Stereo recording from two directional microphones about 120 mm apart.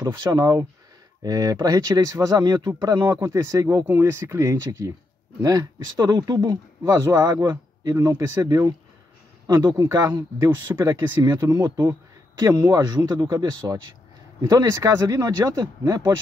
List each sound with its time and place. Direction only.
0.3 s speech: 30° right (ahead or behind)